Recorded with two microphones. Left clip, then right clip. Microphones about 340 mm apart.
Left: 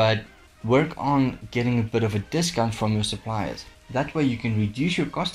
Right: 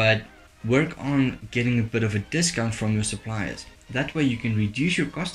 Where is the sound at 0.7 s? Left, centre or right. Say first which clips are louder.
Left 3 dB; centre.